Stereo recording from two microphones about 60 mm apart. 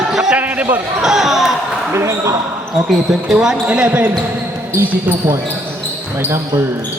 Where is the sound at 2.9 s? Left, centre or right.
Centre.